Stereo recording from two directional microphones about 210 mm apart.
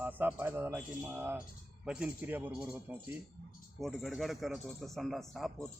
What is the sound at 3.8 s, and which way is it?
A man's voice, centre (ahead or behind).